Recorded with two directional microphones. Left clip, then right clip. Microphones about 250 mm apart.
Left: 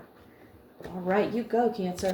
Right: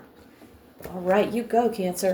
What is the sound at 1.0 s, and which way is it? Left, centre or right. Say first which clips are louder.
Speech: right 5 dB; right.